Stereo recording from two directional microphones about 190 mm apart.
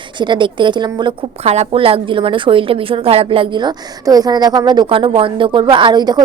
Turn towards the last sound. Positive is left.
turn(degrees=-20)  # may be behind; listen again after turning